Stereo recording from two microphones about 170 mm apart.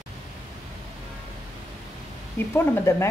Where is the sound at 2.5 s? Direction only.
15° left (ahead or behind).